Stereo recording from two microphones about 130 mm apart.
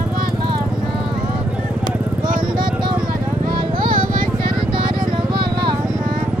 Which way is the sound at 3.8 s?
40° right (ahead or behind).